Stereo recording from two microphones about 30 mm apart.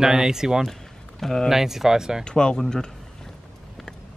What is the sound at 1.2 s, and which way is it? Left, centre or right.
Speech, centre.